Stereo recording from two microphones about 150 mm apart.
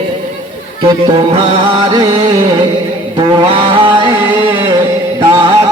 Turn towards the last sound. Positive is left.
turn(degrees=-25)  # may be behind; listen again after turning